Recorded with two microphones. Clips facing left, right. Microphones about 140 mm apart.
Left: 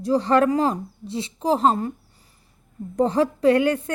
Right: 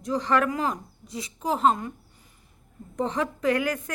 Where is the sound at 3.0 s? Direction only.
35° left (ahead or behind).